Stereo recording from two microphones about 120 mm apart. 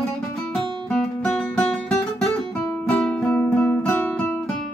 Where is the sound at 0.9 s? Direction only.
5° left (ahead or behind).